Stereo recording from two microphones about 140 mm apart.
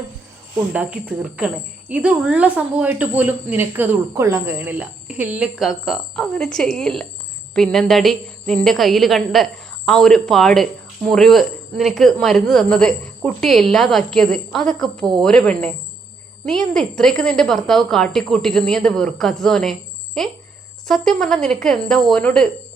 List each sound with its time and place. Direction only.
0.7 s a woman's voice: 10° right (ahead or behind); by 22.4 s 5° left (ahead or behind)